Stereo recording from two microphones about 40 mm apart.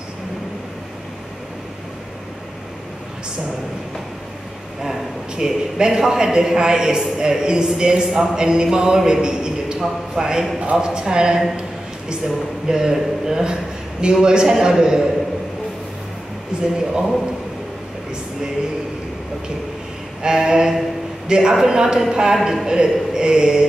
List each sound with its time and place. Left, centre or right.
5.3 s a man's voice: centre
20.2 s a man's voice: centre